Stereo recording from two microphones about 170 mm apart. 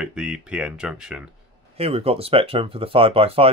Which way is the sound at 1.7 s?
35° right (ahead or behind).